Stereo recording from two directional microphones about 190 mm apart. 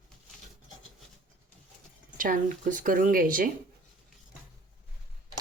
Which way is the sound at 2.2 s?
45° right (ahead or behind).